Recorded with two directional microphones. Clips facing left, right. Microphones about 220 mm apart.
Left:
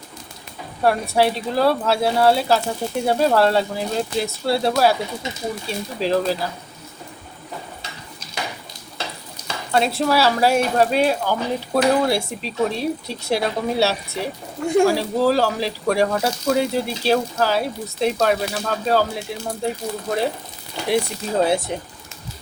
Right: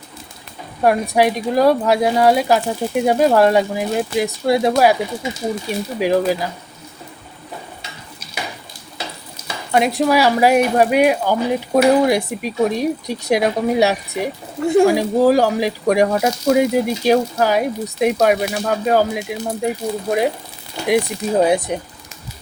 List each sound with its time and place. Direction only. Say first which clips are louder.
0.8 s speech: right 3 dB; 15° right (ahead or behind)
9.7 s speech: right 3 dB; 15° right (ahead or behind)